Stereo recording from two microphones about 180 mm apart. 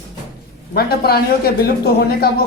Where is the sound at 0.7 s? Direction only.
60° left (ahead or behind).